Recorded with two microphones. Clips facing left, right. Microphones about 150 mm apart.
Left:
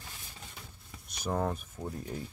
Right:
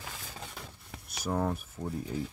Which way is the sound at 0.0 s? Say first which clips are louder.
Right 6 dB; 90° right.